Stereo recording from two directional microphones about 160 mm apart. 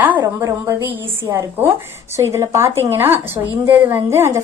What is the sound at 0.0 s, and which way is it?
A woman's voice, 10° right (ahead or behind).